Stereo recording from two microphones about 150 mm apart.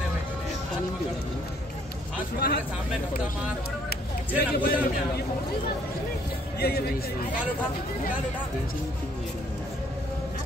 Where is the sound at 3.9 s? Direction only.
90° left.